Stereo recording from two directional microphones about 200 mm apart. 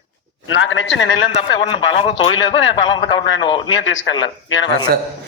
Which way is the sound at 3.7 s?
70° left (ahead or behind).